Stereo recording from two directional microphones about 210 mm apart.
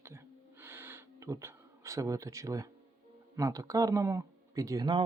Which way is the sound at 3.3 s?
15° right (ahead or behind).